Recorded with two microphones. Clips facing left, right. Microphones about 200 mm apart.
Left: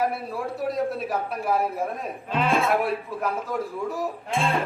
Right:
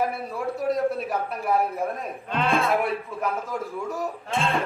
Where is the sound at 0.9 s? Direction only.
Centre (ahead or behind).